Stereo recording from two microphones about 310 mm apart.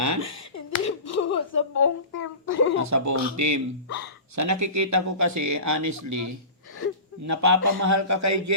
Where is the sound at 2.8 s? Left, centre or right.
Right.